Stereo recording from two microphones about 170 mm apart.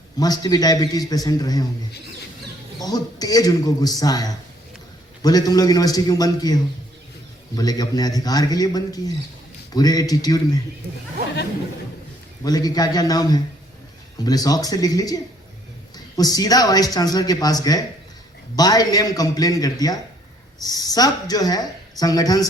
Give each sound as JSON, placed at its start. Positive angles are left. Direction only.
{"t": 0.2, "sound": "speech", "side_deg": 20}
{"t": 2.8, "sound": "speech", "side_deg": 20}
{"t": 12.5, "sound": "speech", "side_deg": 20}